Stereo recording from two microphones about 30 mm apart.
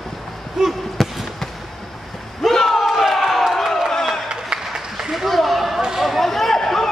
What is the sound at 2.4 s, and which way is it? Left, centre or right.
Battle cry, centre.